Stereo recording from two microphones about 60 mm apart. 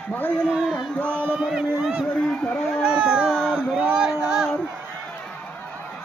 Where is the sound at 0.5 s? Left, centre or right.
Centre.